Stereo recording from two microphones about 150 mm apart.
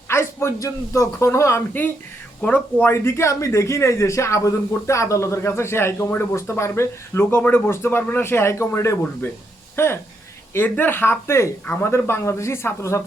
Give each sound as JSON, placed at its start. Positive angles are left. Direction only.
{"t": 0.1, "sound": "a man's voice", "side_deg": 15}